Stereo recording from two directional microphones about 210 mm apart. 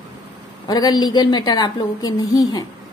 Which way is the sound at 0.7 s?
20° left (ahead or behind).